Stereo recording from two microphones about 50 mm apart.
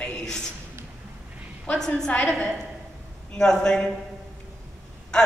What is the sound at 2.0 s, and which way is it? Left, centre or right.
Speech, left.